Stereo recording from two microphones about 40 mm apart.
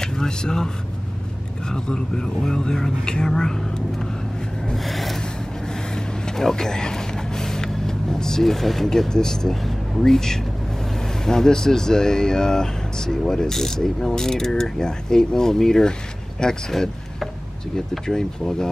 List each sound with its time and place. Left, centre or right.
0.0 s vehicle: centre
1.7 s mechanisms: centre
4.7 s a sound: centre
5.7 s vehicle: centre
9.1 s mechanisms: centre
18.0 s mechanisms: centre